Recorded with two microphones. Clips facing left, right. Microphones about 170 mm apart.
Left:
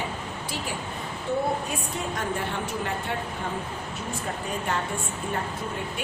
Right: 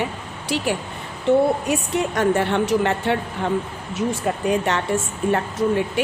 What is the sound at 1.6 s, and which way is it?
Speech, 75° right (ahead or behind).